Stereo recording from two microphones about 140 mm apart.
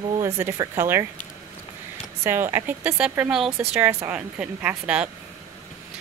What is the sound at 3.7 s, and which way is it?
Speech, 15° right (ahead or behind).